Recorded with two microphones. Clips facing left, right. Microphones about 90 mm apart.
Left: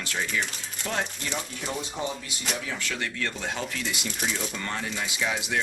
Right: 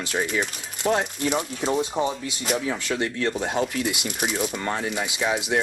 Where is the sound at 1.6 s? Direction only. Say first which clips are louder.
Right 9 dB; 20° right (ahead or behind).